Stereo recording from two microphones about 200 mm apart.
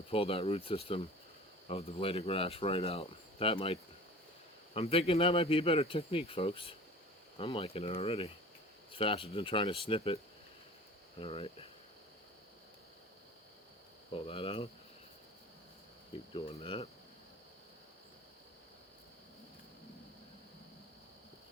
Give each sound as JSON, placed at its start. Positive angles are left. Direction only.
{"t": 0.1, "sound": "speech", "side_deg": 30}
{"t": 11.2, "sound": "speech", "side_deg": 25}
{"t": 14.1, "sound": "speech", "side_deg": 25}
{"t": 16.3, "sound": "speech", "side_deg": 25}